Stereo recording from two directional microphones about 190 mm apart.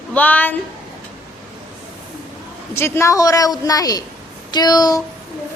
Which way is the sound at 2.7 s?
15° left (ahead or behind).